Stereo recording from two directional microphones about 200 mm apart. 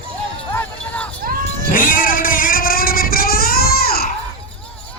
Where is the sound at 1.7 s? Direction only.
45° left (ahead or behind).